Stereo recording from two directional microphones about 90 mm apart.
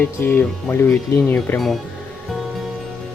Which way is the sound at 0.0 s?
20° left (ahead or behind).